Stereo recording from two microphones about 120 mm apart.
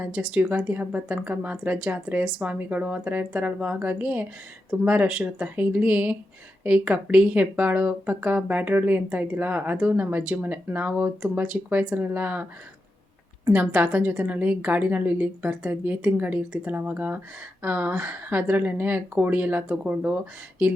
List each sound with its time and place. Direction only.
0.0 s speech: 10° right (ahead or behind)
13.5 s speech: 15° right (ahead or behind)